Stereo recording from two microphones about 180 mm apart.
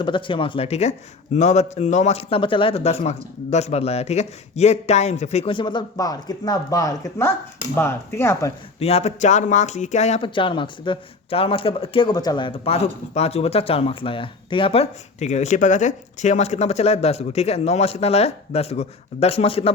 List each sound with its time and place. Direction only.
0.0 s speech: 30° left (ahead or behind)
8.8 s speech: 35° left (ahead or behind)